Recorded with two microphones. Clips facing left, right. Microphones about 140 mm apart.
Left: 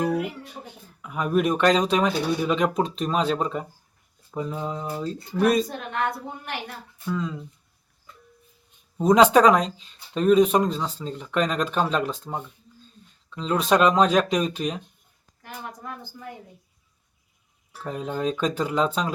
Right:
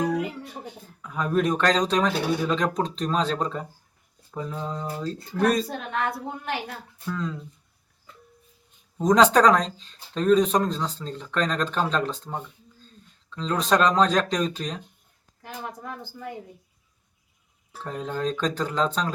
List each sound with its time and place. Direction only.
0.0 s music: 10° left (ahead or behind)
1.0 s speech: 10° left (ahead or behind)
7.0 s speech: 10° left (ahead or behind)
9.0 s speech: 10° left (ahead or behind)
15.4 s speech: 30° right (ahead or behind)
17.8 s speech: 10° left (ahead or behind)